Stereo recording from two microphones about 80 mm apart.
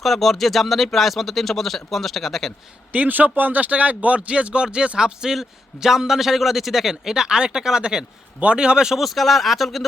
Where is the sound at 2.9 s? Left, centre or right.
Right.